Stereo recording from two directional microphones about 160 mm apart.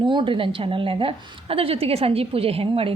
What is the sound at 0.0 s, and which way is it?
A woman's voice, 30° right (ahead or behind).